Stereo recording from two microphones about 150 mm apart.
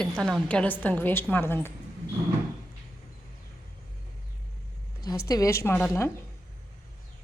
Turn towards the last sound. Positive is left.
turn(degrees=15)  # may be behind; listen again after turning